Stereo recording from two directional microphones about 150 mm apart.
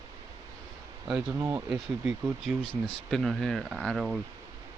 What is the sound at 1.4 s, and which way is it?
Speech, 15° right (ahead or behind).